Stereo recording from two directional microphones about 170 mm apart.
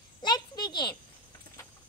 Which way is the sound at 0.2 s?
25° left (ahead or behind).